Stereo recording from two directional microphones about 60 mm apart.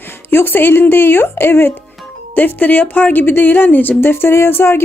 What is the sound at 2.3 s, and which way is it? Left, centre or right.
A woman's voice, left.